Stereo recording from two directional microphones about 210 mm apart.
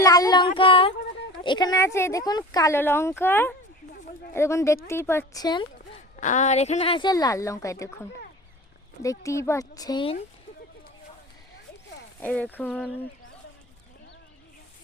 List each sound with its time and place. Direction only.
0.0 s a woman's voice: 15° left (ahead or behind)
6.1 s a woman's voice: 35° left (ahead or behind)
12.2 s speech: 10° left (ahead or behind)